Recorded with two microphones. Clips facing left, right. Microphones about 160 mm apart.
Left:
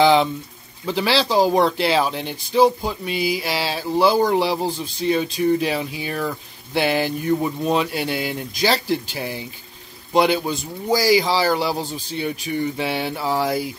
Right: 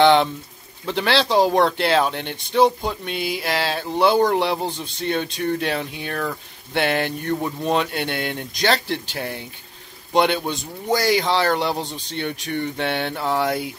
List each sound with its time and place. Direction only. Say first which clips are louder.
0.0 s speech: even; centre (ahead or behind)